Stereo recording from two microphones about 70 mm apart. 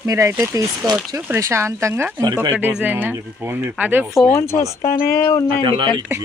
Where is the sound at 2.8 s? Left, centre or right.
Right.